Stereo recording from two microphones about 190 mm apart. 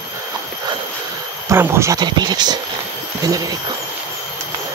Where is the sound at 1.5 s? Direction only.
15° right (ahead or behind).